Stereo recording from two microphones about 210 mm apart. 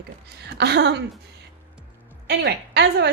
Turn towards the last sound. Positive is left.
turn(degrees=-50)  # may be behind; listen again after turning